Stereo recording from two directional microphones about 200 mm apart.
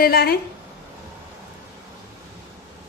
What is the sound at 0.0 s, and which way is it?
Speech, 50° left (ahead or behind).